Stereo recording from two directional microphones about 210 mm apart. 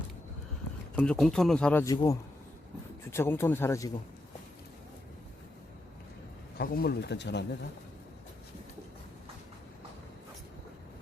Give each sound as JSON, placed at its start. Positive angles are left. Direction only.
{"t": 0.9, "sound": "speech", "side_deg": 5}
{"t": 6.6, "sound": "speech", "side_deg": 45}